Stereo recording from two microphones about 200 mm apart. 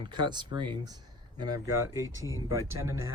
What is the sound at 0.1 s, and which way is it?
Speech, 20° right (ahead or behind).